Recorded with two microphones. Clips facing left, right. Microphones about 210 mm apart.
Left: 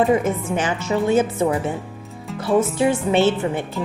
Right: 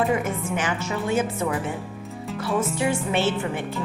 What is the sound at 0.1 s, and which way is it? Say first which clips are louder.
Speech: left 5 dB; 25° left (ahead or behind).